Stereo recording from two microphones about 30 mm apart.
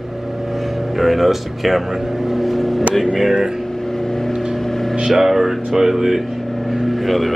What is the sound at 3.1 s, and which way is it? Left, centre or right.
Speech, centre.